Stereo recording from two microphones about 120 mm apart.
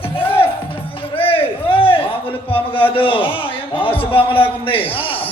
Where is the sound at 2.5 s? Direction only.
50° left (ahead or behind).